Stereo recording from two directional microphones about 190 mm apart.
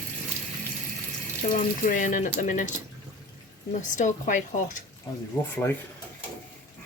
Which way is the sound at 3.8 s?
40° left (ahead or behind).